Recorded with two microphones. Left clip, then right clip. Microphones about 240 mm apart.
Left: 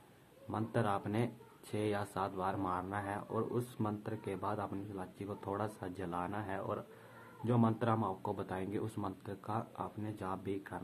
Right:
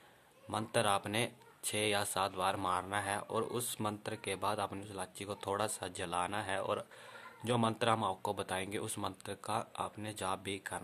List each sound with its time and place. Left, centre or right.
0.5 s speech: right